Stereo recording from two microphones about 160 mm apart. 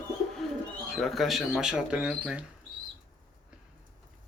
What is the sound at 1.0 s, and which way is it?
Speech, centre (ahead or behind).